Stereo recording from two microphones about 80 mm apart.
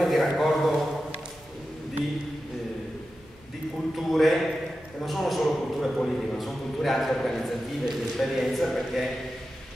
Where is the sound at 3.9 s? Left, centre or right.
Centre.